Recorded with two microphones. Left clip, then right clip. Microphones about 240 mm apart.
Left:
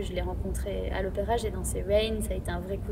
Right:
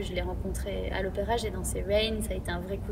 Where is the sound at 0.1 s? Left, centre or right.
Centre.